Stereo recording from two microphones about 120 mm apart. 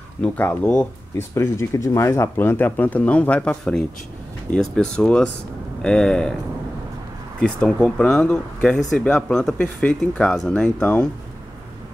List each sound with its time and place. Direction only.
0.2 s speech: 10° left (ahead or behind)
7.3 s speech: 10° left (ahead or behind)